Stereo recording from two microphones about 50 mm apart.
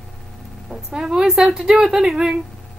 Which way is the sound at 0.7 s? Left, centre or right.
Centre.